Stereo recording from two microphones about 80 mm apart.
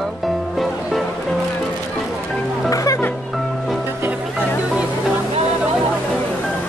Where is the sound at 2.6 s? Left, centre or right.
Left.